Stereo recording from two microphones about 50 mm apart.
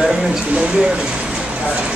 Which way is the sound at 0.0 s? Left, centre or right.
Centre.